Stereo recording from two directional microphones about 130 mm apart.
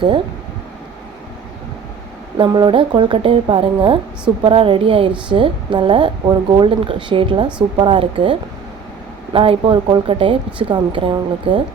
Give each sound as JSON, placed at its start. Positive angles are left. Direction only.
{"t": 2.4, "sound": "a woman's voice", "side_deg": -40}